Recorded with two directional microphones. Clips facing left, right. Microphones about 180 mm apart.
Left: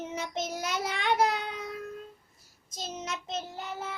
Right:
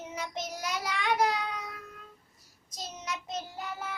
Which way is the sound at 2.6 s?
25° left (ahead or behind).